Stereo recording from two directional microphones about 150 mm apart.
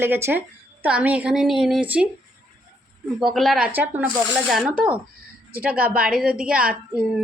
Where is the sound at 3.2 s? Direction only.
Centre (ahead or behind).